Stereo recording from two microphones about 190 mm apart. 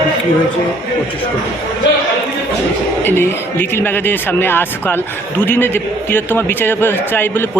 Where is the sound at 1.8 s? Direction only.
70° left (ahead or behind).